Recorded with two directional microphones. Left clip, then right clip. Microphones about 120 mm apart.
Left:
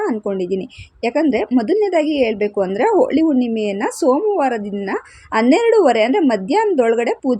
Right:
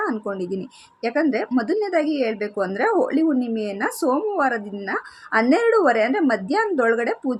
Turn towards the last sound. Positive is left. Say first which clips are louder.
# left 5 dB
turn(degrees=35)  # may be behind; listen again after turning